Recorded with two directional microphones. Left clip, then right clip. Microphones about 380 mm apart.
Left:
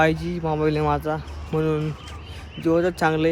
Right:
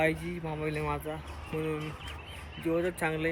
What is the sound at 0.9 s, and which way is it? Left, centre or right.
Speech, left.